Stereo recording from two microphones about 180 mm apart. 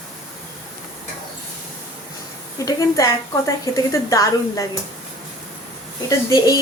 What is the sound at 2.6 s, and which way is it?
A woman's voice, 20° left (ahead or behind).